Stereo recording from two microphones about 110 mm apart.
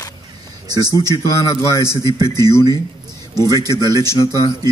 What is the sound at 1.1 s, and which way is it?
Speech, 25° left (ahead or behind).